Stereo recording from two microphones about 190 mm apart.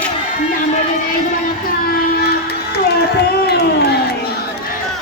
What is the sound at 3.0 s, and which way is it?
Crowd, 55° left (ahead or behind).